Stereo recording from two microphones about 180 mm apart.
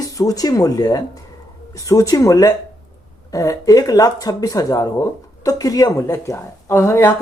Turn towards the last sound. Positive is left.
turn(degrees=15)  # may be behind; listen again after turning